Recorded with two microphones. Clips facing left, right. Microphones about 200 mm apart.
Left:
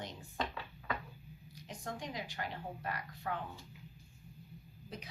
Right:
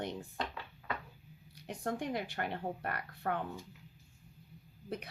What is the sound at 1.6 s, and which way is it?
A woman's voice, 60° right (ahead or behind).